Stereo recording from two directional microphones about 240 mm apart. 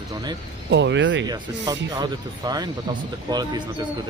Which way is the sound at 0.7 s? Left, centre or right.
Right.